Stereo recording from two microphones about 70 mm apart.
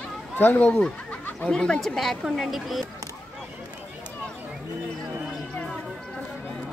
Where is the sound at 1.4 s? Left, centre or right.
Centre.